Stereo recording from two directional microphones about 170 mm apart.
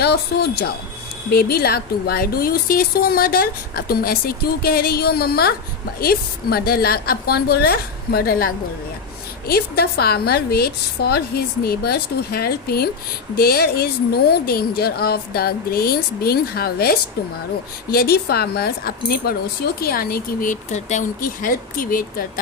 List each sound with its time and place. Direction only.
0.0 s a woman's voice: 70° left (ahead or behind)
9.5 s a woman's voice: 65° left (ahead or behind)